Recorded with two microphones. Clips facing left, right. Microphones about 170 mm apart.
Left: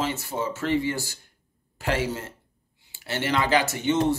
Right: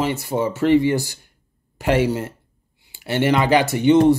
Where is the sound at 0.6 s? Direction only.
65° right (ahead or behind).